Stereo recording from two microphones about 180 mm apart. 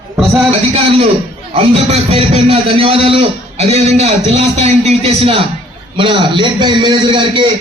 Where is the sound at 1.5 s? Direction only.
35° right (ahead or behind).